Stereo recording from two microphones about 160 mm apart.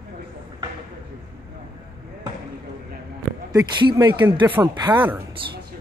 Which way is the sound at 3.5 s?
25° right (ahead or behind).